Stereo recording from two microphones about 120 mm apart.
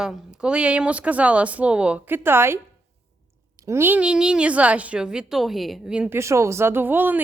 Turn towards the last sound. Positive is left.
turn(degrees=-15)  # may be behind; listen again after turning